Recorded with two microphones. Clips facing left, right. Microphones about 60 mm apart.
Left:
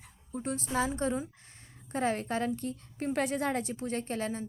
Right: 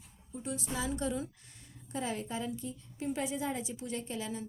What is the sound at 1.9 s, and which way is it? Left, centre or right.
A woman's voice, left.